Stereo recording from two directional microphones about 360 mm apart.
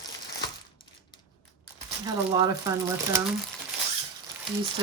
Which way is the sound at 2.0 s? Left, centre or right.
Centre.